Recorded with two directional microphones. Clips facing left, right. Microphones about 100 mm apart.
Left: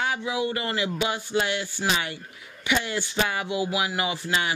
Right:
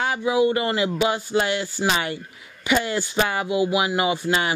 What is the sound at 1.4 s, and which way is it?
Speech, 45° right (ahead or behind).